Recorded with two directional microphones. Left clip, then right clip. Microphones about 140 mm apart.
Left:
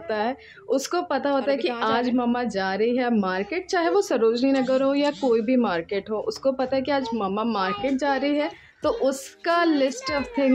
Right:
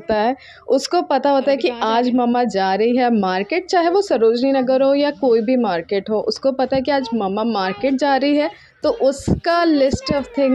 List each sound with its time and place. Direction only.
0.1 s a woman's voice: 45° right (ahead or behind)
7.5 s speech: 50° right (ahead or behind)
8.8 s a woman's voice: 30° right (ahead or behind)